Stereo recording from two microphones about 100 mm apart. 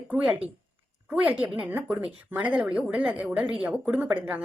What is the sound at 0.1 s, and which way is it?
Speech, 15° right (ahead or behind).